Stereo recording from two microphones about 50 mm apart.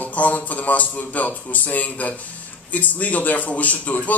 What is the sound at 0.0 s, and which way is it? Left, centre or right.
A man's voice, left.